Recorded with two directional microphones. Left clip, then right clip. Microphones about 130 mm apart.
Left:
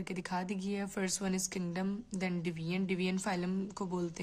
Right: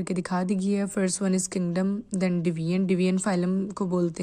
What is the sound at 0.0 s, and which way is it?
A woman's voice, 35° right (ahead or behind).